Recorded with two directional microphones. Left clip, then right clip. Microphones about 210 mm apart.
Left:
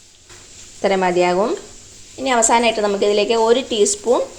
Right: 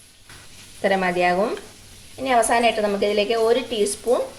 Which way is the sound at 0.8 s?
20° left (ahead or behind).